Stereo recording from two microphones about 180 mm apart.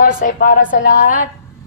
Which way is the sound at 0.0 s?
50° left (ahead or behind).